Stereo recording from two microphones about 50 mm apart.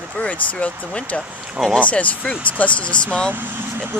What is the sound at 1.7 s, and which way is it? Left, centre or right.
Speech, left.